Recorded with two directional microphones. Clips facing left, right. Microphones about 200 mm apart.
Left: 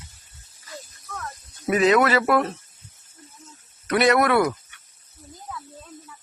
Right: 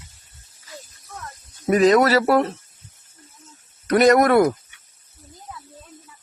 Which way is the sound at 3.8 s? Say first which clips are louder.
Right 4 dB; 40° right (ahead or behind).